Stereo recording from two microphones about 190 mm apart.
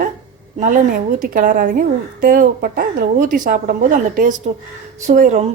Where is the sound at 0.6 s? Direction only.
45° right (ahead or behind).